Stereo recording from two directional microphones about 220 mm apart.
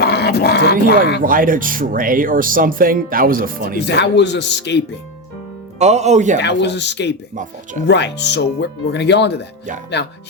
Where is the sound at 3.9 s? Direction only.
50° left (ahead or behind).